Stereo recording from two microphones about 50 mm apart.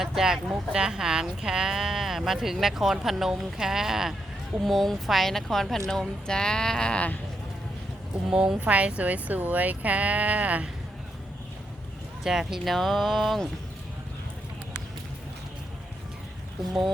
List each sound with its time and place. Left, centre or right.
0.0 s speech: centre
4.6 s speech: centre
8.3 s speech: centre
8.6 s speech: right
12.2 s speech: centre
12.6 s a sound: centre